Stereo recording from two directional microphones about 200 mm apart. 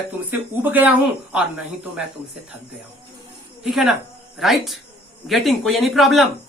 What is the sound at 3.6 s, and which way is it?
A woman's voice, centre (ahead or behind).